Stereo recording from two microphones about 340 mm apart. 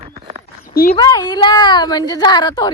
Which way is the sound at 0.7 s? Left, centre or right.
Left.